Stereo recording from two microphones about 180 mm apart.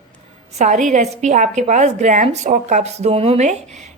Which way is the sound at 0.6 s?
40° right (ahead or behind).